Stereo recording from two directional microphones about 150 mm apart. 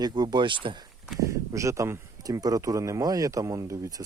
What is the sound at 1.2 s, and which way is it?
Speech, 20° right (ahead or behind).